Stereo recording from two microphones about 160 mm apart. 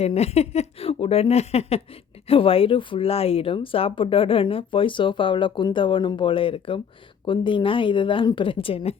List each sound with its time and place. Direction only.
0.0 s a woman's voice: 40° left (ahead or behind)